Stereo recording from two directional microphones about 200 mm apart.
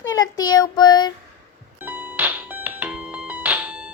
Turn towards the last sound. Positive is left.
turn(degrees=-5)  # may be behind; listen again after turning